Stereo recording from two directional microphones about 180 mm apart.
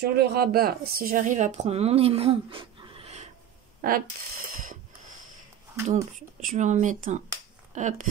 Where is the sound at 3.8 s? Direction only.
50° right (ahead or behind).